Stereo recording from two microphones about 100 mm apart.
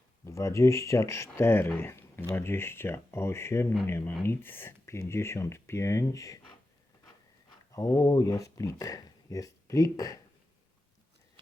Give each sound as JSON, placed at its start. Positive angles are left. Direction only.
{"t": 0.3, "sound": "speech", "side_deg": 30}
{"t": 7.7, "sound": "speech", "side_deg": 35}